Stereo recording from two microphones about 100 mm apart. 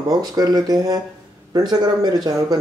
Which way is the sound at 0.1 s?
40° right (ahead or behind).